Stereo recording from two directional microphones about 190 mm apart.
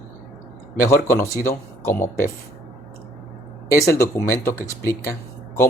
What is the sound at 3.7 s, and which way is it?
Speech, 15° left (ahead or behind).